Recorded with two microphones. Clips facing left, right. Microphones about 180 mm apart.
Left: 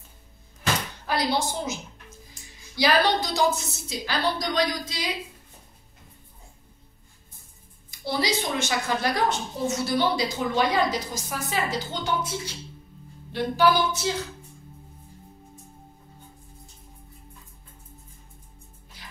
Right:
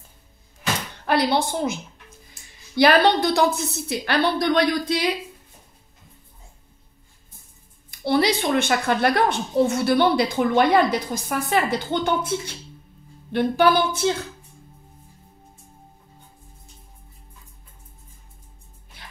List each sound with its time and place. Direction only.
1.0 s a woman's voice: 60° right (ahead or behind)
7.9 s a woman's voice: 60° right (ahead or behind)
19.0 s music: 60° right (ahead or behind)